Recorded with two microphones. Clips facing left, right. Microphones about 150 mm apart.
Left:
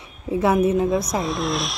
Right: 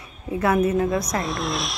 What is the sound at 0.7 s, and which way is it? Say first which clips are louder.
Speech: left 2 dB; 5° left (ahead or behind).